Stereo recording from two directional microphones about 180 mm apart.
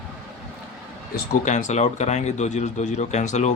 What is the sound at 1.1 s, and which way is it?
Speech, 45° left (ahead or behind).